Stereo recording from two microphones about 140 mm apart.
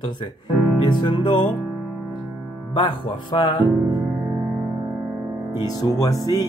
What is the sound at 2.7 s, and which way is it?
Speech, 35° left (ahead or behind).